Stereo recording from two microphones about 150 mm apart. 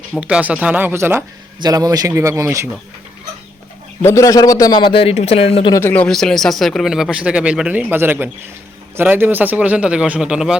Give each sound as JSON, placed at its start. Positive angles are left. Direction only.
{"t": 0.2, "sound": "speech", "side_deg": -10}
{"t": 1.6, "sound": "speech", "side_deg": -25}
{"t": 4.0, "sound": "a man's voice", "side_deg": 20}
{"t": 5.7, "sound": "speech", "side_deg": 15}